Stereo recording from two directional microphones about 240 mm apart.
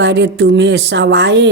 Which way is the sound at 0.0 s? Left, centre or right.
Right.